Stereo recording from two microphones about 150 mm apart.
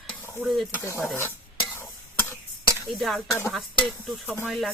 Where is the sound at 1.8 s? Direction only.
15° left (ahead or behind).